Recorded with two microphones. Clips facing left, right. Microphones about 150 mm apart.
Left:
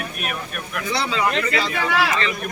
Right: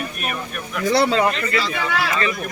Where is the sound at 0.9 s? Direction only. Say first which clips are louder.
Right 8 dB; 50° right (ahead or behind).